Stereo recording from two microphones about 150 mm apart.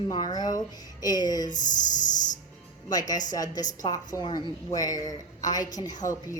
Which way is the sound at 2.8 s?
25° left (ahead or behind).